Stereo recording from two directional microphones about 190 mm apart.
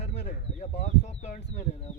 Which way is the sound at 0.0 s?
35° left (ahead or behind).